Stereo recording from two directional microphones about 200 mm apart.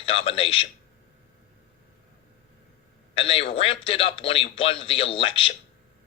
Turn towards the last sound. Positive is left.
turn(degrees=25)  # may be behind; listen again after turning